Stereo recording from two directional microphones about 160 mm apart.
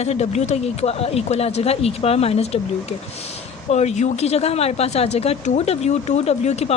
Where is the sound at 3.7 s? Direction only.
45° left (ahead or behind).